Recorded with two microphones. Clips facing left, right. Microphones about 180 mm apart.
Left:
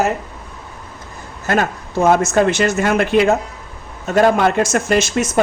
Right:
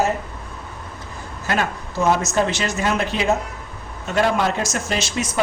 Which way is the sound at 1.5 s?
50° left (ahead or behind).